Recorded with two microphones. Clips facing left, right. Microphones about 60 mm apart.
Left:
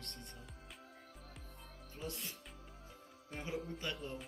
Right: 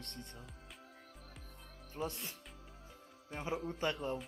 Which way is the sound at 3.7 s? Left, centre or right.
Right.